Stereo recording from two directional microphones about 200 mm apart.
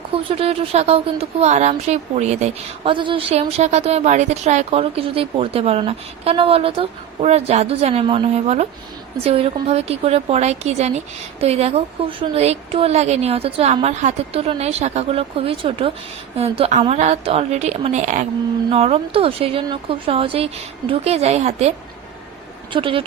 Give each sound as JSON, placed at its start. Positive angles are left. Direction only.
{"t": 0.1, "sound": "a woman's voice", "side_deg": -30}
{"t": 22.7, "sound": "speech", "side_deg": -25}